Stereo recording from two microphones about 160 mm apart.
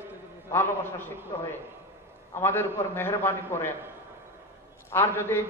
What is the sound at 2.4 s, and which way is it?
A man's voice, 15° left (ahead or behind).